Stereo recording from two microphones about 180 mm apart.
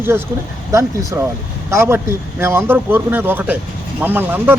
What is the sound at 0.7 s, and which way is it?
Speech, 15° right (ahead or behind).